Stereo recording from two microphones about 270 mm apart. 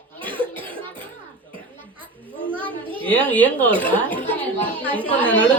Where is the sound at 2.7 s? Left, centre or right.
Centre.